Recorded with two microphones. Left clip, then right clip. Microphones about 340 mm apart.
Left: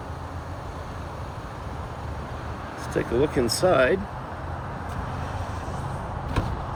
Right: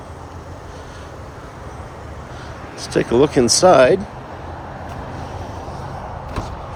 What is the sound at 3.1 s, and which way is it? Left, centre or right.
Speech, right.